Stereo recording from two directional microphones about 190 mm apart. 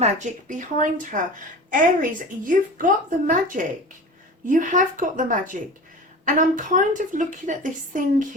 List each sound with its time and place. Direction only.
0.0 s a woman's voice: 40° right (ahead or behind)